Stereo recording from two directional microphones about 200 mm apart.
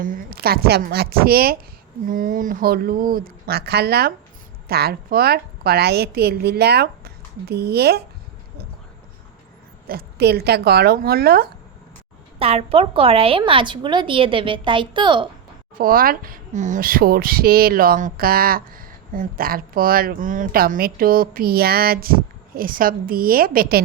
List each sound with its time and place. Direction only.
0.0 s speech: 45° right (ahead or behind)
9.8 s speech: 50° right (ahead or behind)
12.4 s a woman's voice: 30° right (ahead or behind)
15.8 s speech: 45° right (ahead or behind)